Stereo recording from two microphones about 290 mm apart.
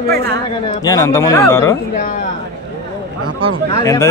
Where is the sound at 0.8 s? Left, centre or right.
Centre.